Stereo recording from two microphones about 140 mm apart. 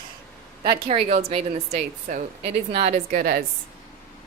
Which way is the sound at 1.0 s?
45° right (ahead or behind).